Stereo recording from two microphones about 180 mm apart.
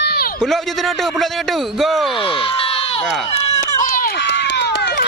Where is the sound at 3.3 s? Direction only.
40° left (ahead or behind); by 5.0 s 70° left (ahead or behind).